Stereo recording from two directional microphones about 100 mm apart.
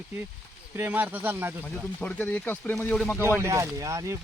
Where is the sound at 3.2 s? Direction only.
25° right (ahead or behind).